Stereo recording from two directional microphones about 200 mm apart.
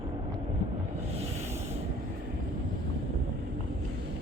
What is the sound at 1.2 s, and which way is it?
Sanding, 30° right (ahead or behind).